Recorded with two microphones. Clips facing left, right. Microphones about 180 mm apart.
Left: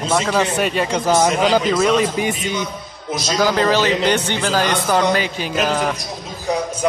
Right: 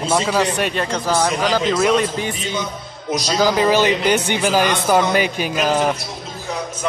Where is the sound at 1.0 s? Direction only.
15° left (ahead or behind).